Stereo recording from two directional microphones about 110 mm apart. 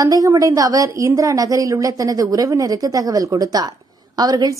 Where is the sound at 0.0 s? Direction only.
30° right (ahead or behind).